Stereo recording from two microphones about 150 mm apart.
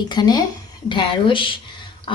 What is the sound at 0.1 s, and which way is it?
A woman's voice, 30° left (ahead or behind).